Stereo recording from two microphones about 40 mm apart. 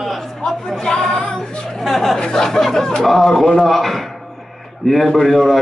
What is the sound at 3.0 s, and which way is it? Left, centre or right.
Speech, centre.